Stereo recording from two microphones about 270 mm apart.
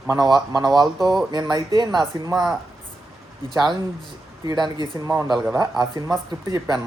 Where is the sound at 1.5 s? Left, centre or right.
Centre.